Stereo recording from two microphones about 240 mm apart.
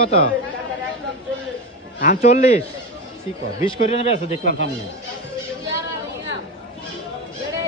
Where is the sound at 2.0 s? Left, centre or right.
Left.